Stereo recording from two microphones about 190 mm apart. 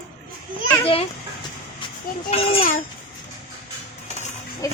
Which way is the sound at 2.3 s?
30° left (ahead or behind).